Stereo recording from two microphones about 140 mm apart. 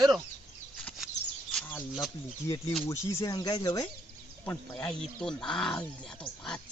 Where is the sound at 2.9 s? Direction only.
20° left (ahead or behind).